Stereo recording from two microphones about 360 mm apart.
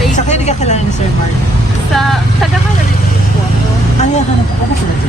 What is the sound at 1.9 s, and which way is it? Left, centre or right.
Speech, centre.